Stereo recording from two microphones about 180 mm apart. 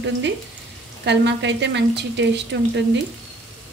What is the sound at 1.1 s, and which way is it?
A woman's voice, 75° right (ahead or behind).